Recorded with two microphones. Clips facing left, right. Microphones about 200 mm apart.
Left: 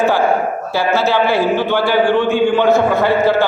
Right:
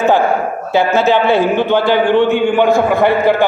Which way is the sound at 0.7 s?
20° right (ahead or behind).